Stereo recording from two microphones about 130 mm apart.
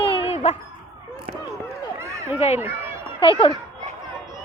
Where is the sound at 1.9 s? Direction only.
20° right (ahead or behind).